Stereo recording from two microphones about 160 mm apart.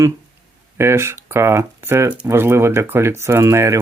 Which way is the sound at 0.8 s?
15° right (ahead or behind).